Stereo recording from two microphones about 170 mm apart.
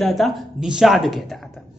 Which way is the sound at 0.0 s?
Centre (ahead or behind).